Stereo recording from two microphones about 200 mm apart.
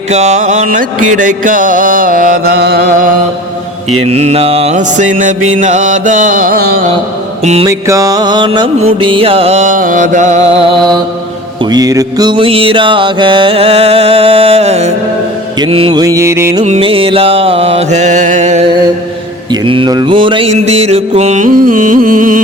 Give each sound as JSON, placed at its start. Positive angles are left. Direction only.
{"t": 0.1, "sound": "mantra", "side_deg": -35}
{"t": 1.0, "sound": "music", "side_deg": -40}
{"t": 4.0, "sound": "mantra", "side_deg": -30}
{"t": 7.4, "sound": "mantra", "side_deg": -30}
{"t": 7.7, "sound": "music", "side_deg": -15}
{"t": 16.6, "sound": "mantra", "side_deg": -30}
{"t": 19.5, "sound": "mantra", "side_deg": -25}